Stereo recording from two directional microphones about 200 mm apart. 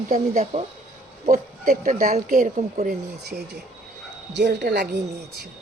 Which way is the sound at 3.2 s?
55° right (ahead or behind).